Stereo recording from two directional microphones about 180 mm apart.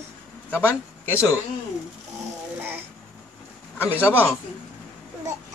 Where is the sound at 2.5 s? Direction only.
10° right (ahead or behind).